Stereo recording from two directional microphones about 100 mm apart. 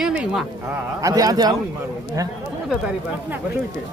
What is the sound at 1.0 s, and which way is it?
Speech, 40° right (ahead or behind).